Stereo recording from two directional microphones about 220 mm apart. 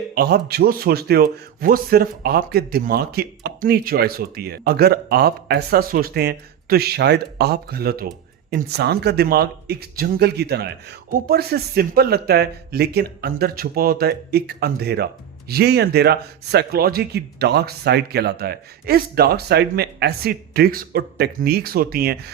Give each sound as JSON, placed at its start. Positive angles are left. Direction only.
{"t": 0.1, "sound": "speech", "side_deg": -45}